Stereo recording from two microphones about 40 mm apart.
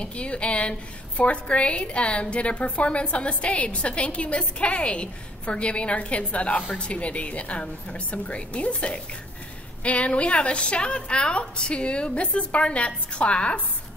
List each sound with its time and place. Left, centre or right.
0.0 s a woman's voice: left